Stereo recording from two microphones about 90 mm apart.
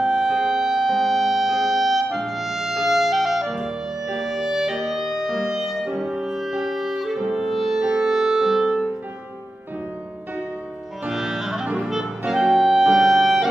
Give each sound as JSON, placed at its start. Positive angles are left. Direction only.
{"t": 0.0, "sound": "music", "side_deg": -5}
{"t": 11.1, "sound": "clarinet", "side_deg": -5}